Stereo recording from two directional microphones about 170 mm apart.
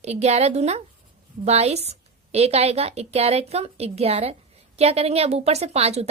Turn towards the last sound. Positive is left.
turn(degrees=-40)  # may be behind; listen again after turning